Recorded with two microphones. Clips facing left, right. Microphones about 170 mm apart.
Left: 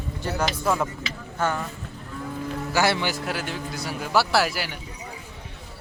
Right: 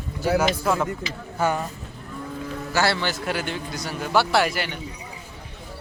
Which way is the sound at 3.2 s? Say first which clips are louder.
Right 2 dB; centre (ahead or behind).